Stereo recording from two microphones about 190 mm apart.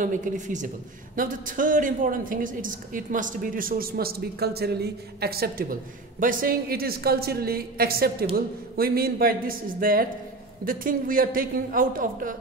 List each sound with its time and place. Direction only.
0.0 s speech: 40° right (ahead or behind)